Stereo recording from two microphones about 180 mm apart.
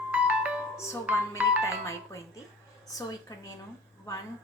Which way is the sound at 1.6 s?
15° left (ahead or behind).